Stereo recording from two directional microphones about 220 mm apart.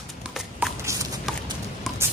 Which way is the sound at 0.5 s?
5° right (ahead or behind).